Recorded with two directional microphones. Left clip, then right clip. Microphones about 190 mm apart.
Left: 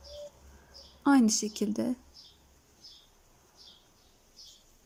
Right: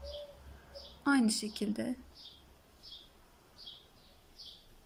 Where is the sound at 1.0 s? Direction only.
20° left (ahead or behind).